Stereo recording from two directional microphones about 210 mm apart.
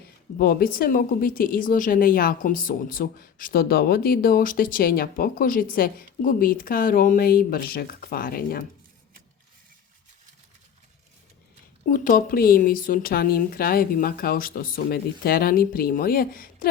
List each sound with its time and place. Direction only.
0.3 s a woman's voice: 45° left (ahead or behind)
11.9 s a woman's voice: 40° left (ahead or behind)